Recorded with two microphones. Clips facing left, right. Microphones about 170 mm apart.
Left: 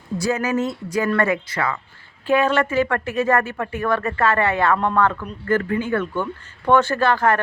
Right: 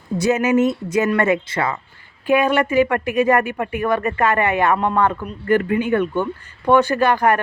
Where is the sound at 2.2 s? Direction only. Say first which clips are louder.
Right 2 dB; 15° right (ahead or behind).